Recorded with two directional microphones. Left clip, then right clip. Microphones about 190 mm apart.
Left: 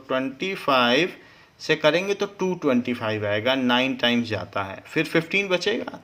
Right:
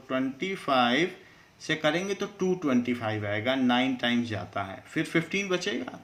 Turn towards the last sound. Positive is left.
turn(degrees=45)  # may be behind; listen again after turning